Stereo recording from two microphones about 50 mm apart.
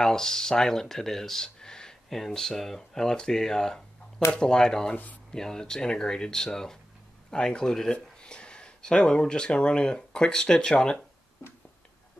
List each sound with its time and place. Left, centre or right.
0.0 s speech: centre
4.9 s speech: left
5.3 s speech: centre